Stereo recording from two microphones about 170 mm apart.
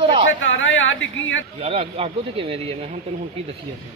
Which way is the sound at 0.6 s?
90° left.